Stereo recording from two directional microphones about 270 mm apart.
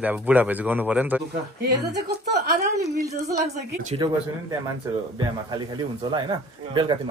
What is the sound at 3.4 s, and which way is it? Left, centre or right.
Speech, right.